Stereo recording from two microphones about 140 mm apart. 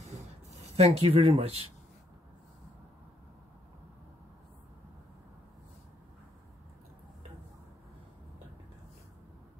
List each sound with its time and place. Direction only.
0.6 s speech: 50° right (ahead or behind)